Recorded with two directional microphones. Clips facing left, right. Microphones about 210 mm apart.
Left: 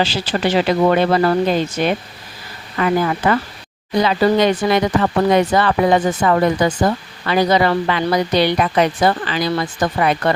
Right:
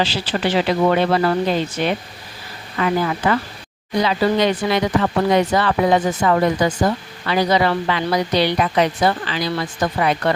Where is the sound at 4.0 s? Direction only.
50° left (ahead or behind).